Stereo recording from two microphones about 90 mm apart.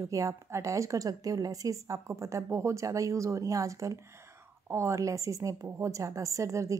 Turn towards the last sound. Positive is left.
turn(degrees=-35)  # may be behind; listen again after turning